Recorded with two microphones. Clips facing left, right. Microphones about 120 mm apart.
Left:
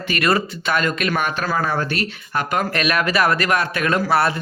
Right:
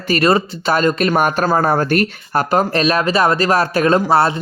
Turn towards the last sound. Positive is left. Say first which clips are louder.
# right 5 dB
turn(degrees=-25)  # may be behind; listen again after turning